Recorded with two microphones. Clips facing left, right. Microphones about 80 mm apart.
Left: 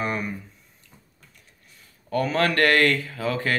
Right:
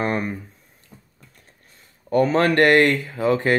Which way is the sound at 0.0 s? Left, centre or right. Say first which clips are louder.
Right 4 dB; right.